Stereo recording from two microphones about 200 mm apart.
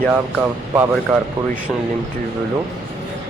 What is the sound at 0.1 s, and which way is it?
Speech, 5° right (ahead or behind).